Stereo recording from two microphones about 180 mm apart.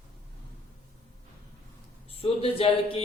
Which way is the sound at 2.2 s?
30° left (ahead or behind).